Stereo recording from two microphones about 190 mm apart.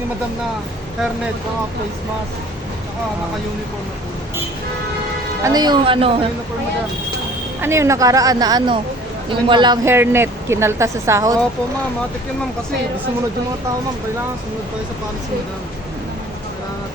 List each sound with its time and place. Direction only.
5.4 s speech: 20° right (ahead or behind)
7.6 s a woman's voice: 15° right (ahead or behind)
9.8 s a woman's voice: 10° right (ahead or behind)